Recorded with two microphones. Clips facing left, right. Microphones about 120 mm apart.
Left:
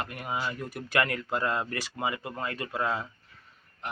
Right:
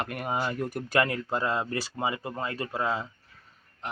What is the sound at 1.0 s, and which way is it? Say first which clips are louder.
Speech: right 1 dB; 25° right (ahead or behind).